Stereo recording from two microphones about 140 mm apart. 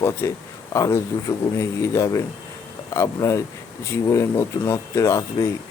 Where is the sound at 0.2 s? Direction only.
20° left (ahead or behind).